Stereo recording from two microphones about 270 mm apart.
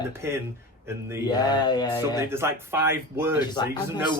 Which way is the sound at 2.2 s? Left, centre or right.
Centre.